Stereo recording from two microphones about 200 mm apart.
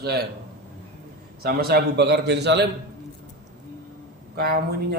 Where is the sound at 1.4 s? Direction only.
50° right (ahead or behind).